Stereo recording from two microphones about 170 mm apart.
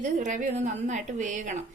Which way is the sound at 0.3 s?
50° right (ahead or behind).